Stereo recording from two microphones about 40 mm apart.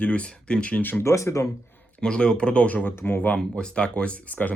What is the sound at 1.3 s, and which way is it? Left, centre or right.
Speech, left.